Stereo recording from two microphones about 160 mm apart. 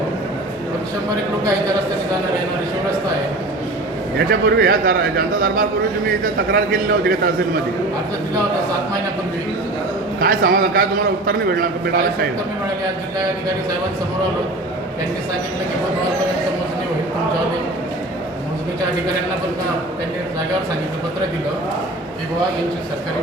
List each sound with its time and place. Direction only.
4.3 s a man's voice: 70° right (ahead or behind)
10.2 s a man's voice: 60° right (ahead or behind)